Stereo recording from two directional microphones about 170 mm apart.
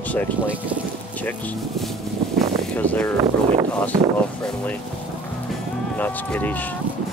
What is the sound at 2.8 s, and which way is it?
Speech, 10° left (ahead or behind).